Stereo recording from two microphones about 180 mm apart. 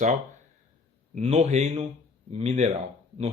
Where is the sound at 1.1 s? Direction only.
35° right (ahead or behind).